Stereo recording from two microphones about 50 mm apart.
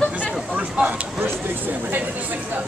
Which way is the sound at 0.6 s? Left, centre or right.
Right.